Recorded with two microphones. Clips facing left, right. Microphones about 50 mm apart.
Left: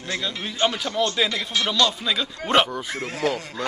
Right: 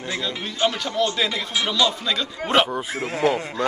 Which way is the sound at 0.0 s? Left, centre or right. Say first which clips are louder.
Right 1 dB; centre.